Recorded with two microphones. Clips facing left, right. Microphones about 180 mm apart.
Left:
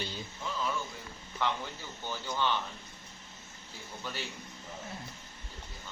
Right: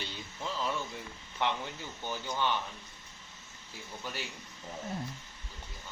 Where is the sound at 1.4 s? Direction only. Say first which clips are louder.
Right 1 dB; 20° right (ahead or behind).